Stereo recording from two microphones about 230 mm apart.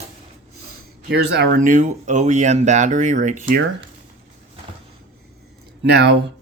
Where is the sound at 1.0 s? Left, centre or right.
Right.